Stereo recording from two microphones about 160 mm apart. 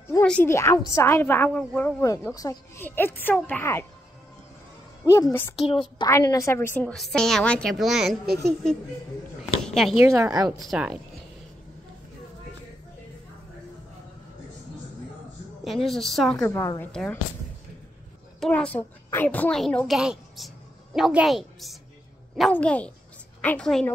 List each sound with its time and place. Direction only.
0.1 s a woman's voice: 10° left (ahead or behind)
2.3 s a woman's voice: 20° left (ahead or behind)
5.0 s a woman's voice: 20° left (ahead or behind)
5.7 s a woman's voice: 30° left (ahead or behind)
6.0 s a woman's voice: 20° left (ahead or behind); by 8.2 s centre (ahead or behind)
9.4 s speech: centre (ahead or behind)
10.0 s speech: 20° right (ahead or behind)
10.6 s a woman's voice: 5° right (ahead or behind)
15.6 s a woman's voice: centre (ahead or behind)
16.4 s a woman's voice: 20° left (ahead or behind)
16.8 s a woman's voice: 5° left (ahead or behind)
18.4 s a woman's voice: 5° left (ahead or behind)